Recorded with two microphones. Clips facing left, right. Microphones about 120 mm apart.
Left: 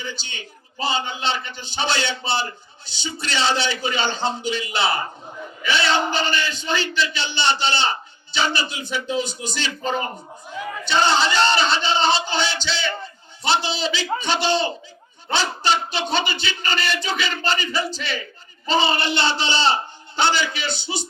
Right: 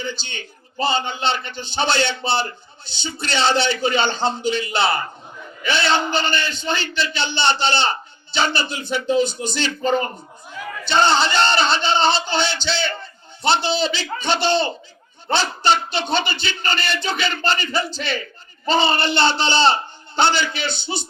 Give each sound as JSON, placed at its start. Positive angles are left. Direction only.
{"t": 0.0, "sound": "a man's voice", "side_deg": -65}